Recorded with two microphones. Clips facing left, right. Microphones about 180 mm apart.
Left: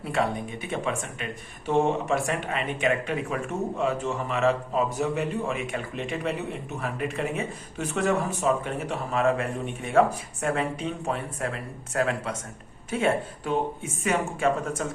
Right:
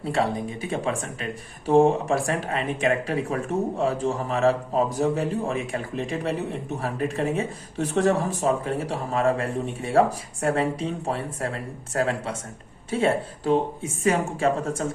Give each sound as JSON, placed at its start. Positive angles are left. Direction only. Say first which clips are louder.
{"t": 0.0, "sound": "speech", "louder": "right 2 dB", "side_deg": -30}